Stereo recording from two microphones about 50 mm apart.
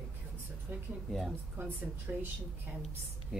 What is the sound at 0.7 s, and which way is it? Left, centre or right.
Speech, right.